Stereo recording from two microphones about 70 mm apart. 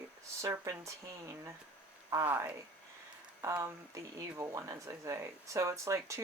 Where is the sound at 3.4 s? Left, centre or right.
Right.